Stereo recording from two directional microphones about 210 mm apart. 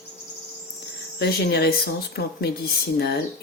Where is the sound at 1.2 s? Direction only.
50° left (ahead or behind).